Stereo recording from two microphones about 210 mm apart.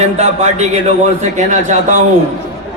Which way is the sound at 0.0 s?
30° right (ahead or behind).